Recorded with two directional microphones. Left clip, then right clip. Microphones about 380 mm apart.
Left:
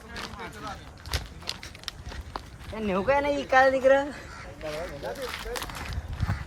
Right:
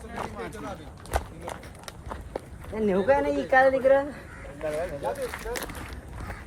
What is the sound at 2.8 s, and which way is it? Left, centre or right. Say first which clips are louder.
Speech: right 2 dB; centre.